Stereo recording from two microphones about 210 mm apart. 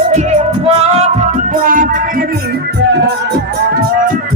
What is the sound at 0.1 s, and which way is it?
Music, 35° right (ahead or behind).